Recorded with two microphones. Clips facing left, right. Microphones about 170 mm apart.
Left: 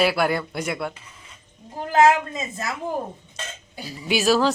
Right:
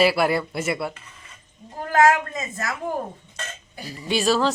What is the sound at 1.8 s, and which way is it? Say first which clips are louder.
Speech: left 1 dB; 20° left (ahead or behind).